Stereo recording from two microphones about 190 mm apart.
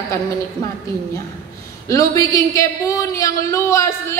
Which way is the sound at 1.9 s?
15° left (ahead or behind).